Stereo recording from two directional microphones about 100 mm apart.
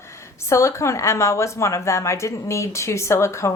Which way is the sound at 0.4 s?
30° left (ahead or behind).